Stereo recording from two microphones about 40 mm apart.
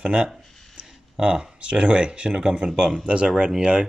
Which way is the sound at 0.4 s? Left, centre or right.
Centre.